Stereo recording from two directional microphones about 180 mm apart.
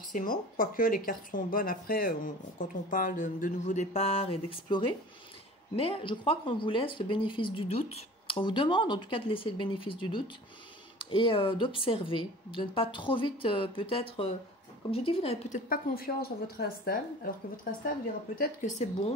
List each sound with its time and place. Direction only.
0.1 s a woman's voice: 50° left (ahead or behind); by 15.6 s 35° left (ahead or behind)
15.7 s speech: 55° left (ahead or behind)